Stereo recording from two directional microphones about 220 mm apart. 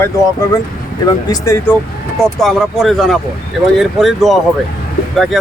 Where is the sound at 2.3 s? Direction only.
Centre (ahead or behind).